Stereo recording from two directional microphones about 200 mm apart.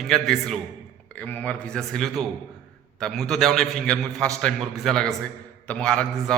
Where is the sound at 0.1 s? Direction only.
Centre (ahead or behind).